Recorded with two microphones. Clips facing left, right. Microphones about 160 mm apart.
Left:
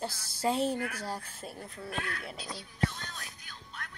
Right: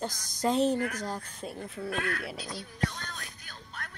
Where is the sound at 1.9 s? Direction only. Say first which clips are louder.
Right 5 dB; 60° right (ahead or behind).